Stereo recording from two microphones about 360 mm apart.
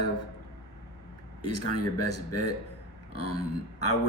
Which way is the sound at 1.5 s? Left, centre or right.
Left.